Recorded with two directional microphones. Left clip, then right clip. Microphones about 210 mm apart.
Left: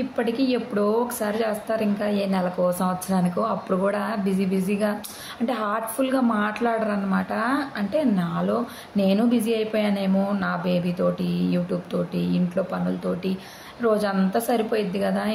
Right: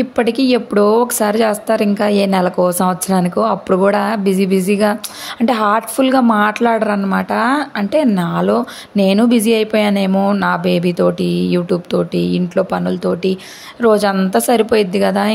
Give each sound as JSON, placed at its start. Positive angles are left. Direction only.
{"t": 0.1, "sound": "speech", "side_deg": -50}